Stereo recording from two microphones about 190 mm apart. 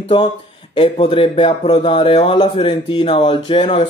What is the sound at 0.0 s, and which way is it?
Speech, 25° left (ahead or behind).